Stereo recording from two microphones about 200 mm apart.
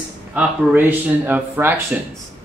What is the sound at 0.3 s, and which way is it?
Speech, 5° right (ahead or behind).